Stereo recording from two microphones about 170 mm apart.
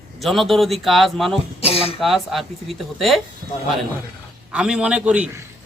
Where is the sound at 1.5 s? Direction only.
35° left (ahead or behind).